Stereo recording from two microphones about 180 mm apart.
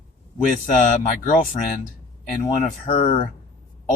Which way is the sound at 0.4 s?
45° left (ahead or behind).